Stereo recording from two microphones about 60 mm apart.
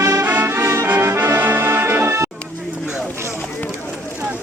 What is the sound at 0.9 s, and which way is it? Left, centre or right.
Music, right.